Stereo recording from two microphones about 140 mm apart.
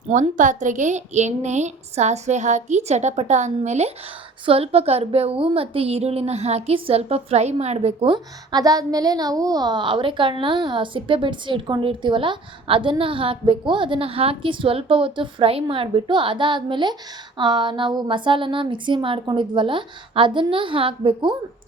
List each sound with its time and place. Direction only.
0.1 s a woman's voice: 65° right (ahead or behind)
8.1 s a woman's voice: 25° right (ahead or behind)